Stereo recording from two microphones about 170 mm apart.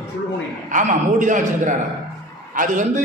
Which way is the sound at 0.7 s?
50° right (ahead or behind).